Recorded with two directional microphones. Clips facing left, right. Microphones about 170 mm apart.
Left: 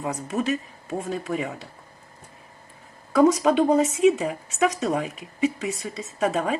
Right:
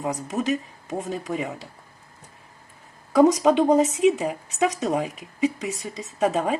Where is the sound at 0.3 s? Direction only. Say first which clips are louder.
Left 1 dB; 15° right (ahead or behind).